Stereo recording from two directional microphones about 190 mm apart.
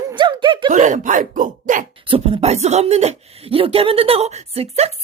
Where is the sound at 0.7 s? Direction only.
40° right (ahead or behind).